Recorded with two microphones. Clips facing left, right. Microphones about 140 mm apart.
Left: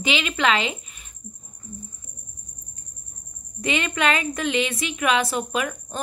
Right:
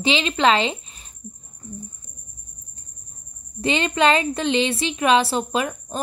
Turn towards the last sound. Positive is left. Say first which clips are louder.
# right 3 dB
turn(degrees=-30)  # may be behind; listen again after turning